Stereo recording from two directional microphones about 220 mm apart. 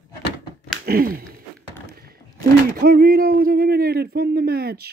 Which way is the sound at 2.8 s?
45° right (ahead or behind).